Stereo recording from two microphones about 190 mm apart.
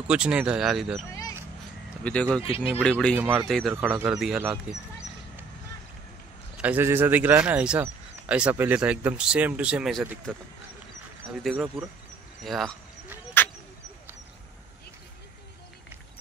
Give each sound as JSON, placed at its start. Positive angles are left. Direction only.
{"t": 0.1, "sound": "speech", "side_deg": -5}
{"t": 2.0, "sound": "speech", "side_deg": 5}
{"t": 2.4, "sound": "speech", "side_deg": 30}
{"t": 2.8, "sound": "speech", "side_deg": 5}
{"t": 3.2, "sound": "a man's voice", "side_deg": -5}
{"t": 6.6, "sound": "a man's voice", "side_deg": -10}
{"t": 11.3, "sound": "speech", "side_deg": -5}